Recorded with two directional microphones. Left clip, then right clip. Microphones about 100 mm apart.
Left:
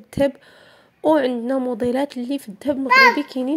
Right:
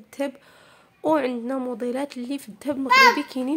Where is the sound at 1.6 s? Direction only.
35° left (ahead or behind); by 2.8 s 20° left (ahead or behind).